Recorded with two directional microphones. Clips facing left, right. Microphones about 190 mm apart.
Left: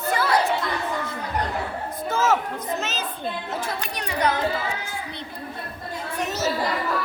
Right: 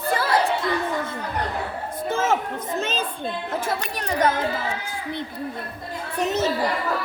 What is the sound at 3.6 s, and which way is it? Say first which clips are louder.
Chatter: right 3 dB; 45° right (ahead or behind).